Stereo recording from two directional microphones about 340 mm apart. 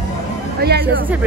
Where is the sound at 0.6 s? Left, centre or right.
Right.